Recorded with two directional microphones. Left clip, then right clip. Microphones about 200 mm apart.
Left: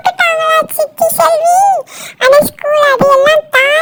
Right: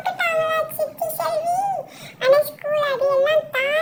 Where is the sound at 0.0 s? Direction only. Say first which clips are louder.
Left 10 dB; 45° left (ahead or behind).